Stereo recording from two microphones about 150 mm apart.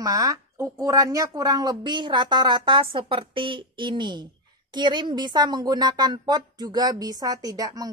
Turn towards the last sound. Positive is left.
turn(degrees=-25)  # may be behind; listen again after turning